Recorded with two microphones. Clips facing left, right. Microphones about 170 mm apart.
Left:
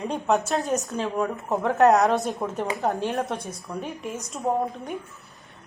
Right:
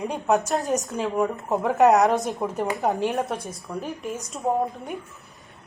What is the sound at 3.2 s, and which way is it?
A woman's voice, centre (ahead or behind).